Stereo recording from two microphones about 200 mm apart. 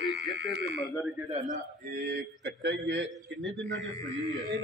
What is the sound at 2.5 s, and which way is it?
A man's voice, 60° right (ahead or behind).